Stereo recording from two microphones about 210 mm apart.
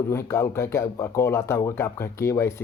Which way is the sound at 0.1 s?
10° left (ahead or behind).